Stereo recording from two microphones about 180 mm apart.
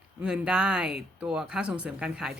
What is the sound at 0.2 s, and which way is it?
Speech, 5° right (ahead or behind).